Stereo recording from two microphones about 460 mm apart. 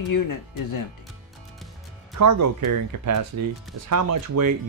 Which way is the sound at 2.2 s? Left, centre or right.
Right.